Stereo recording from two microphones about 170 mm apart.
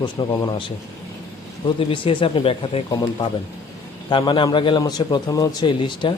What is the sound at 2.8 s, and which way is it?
A man's voice, 25° left (ahead or behind).